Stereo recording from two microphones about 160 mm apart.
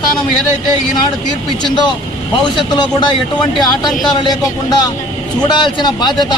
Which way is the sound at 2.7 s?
25° left (ahead or behind).